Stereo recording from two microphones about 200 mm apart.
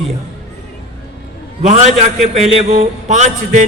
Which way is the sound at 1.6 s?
35° right (ahead or behind).